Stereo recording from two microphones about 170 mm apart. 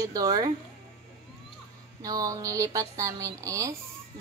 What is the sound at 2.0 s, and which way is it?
Speech, 20° right (ahead or behind).